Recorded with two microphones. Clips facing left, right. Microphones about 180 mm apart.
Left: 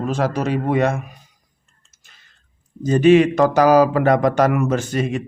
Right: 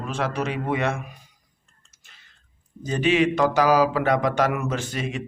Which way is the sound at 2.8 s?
45° left (ahead or behind).